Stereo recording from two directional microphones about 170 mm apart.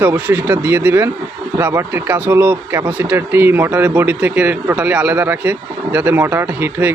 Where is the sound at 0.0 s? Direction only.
10° right (ahead or behind).